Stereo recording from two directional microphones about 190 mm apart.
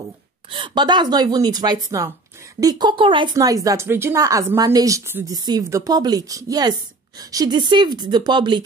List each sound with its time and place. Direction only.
0.5 s speech: 25° right (ahead or behind)